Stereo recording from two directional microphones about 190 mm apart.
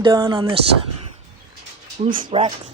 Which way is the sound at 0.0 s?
20° right (ahead or behind).